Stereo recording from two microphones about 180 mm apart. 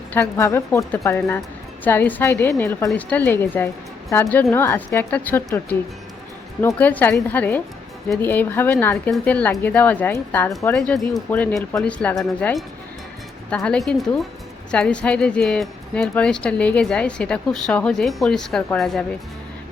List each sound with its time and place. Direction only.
0.1 s a woman's voice: 15° left (ahead or behind)